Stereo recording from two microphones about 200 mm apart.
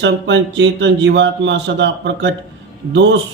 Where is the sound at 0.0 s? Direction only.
65° right (ahead or behind).